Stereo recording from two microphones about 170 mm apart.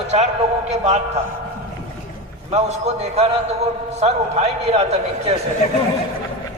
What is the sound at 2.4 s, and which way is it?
A man's voice, 40° right (ahead or behind).